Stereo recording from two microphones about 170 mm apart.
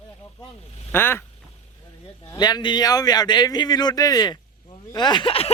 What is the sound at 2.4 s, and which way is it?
A man's voice, 25° left (ahead or behind).